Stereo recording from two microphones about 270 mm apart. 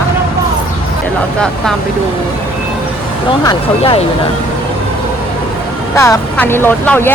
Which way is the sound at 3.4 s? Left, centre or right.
Left.